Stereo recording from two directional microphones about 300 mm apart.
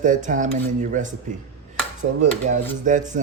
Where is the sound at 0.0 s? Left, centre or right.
Right.